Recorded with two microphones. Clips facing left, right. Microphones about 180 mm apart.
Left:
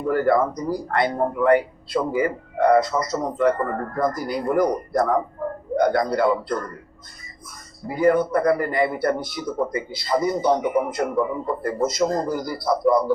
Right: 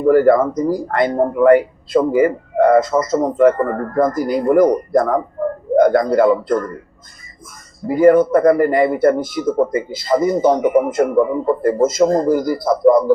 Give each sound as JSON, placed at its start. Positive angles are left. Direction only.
{"t": 0.0, "sound": "a man's voice", "side_deg": -45}
{"t": 7.9, "sound": "a man's voice", "side_deg": -45}